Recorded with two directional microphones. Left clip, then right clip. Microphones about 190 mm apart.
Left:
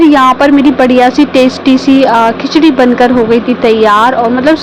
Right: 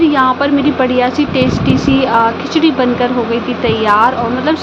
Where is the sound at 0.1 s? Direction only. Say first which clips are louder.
Left 6 dB; 35° left (ahead or behind).